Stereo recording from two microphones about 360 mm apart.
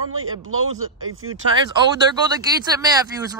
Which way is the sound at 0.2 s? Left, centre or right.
Right.